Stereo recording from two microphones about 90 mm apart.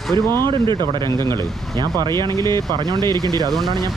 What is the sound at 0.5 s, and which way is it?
Speech, 60° right (ahead or behind).